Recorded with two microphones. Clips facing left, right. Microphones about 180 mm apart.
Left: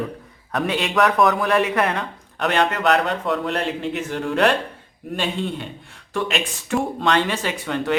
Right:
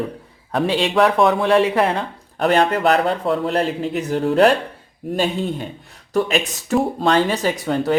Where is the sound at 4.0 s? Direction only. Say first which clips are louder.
Right 6 dB; 35° right (ahead or behind).